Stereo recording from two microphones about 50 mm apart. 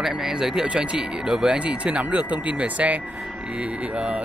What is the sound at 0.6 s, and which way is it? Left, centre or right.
Speech, right.